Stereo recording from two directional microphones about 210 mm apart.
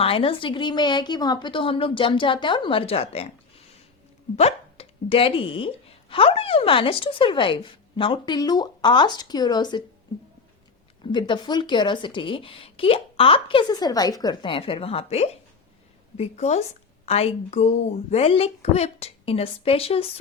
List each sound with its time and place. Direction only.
0.0 s speech: 25° left (ahead or behind)
11.0 s a woman's voice: 20° left (ahead or behind)